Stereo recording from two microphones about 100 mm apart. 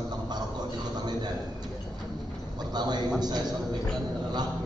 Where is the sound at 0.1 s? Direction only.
45° right (ahead or behind).